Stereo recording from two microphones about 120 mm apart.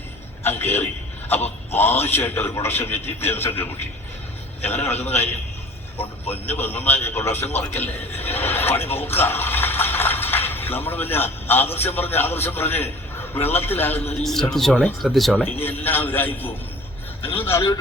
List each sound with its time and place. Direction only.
0.4 s a man's voice: 20° left (ahead or behind)
6.0 s a man's voice: 15° left (ahead or behind)
14.2 s a man's voice: 5° left (ahead or behind); by 17.7 s 20° left (ahead or behind)